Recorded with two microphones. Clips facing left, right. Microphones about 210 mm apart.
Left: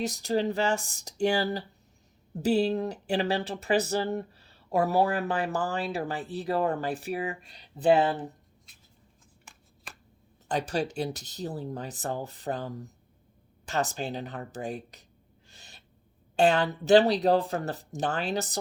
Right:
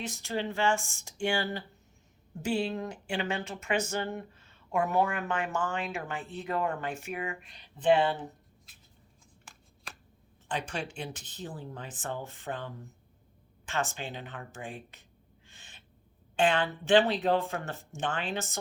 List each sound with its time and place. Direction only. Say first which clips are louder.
0.0 s speech: left 7 dB; 40° left (ahead or behind)
10.5 s speech: left 6 dB; 40° left (ahead or behind)
15.4 s owl: left 3 dB; 40° left (ahead or behind)
16.3 s speech: left 4 dB; 40° left (ahead or behind)